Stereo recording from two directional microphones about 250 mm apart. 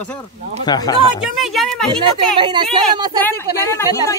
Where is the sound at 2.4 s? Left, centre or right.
Centre.